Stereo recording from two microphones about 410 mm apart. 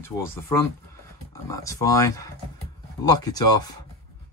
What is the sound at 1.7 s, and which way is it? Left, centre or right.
Speech, centre.